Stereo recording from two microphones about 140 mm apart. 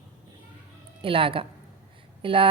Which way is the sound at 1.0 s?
40° right (ahead or behind).